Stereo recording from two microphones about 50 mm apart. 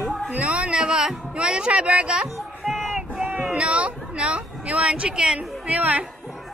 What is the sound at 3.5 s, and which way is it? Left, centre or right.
Speech, right.